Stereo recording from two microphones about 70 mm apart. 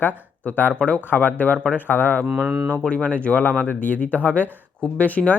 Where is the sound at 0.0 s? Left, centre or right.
Left.